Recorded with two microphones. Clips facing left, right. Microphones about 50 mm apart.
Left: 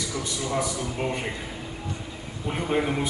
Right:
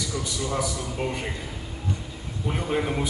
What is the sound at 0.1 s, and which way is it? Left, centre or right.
A man's voice, centre.